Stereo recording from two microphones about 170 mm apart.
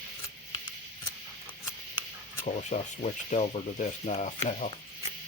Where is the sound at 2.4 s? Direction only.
45° left (ahead or behind).